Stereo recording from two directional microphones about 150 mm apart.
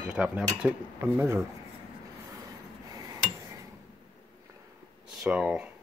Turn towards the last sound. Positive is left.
turn(degrees=-5)  # may be behind; listen again after turning